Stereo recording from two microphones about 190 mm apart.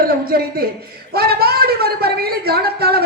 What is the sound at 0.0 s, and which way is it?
A man's voice, 50° right (ahead or behind).